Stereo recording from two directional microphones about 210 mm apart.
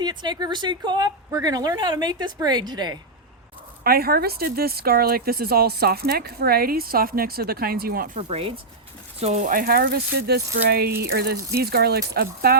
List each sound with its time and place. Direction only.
0.0 s a woman's voice: 20° right (ahead or behind)
3.8 s speech: 45° right (ahead or behind)
8.3 s a woman's voice: 30° right (ahead or behind); by 12.5 s 50° right (ahead or behind)